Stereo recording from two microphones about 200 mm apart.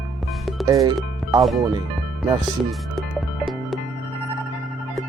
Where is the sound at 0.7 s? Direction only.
15° right (ahead or behind).